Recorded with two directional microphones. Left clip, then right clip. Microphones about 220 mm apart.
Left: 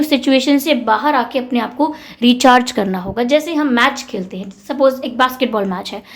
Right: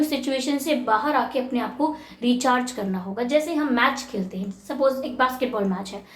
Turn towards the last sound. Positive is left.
turn(degrees=40)  # may be behind; listen again after turning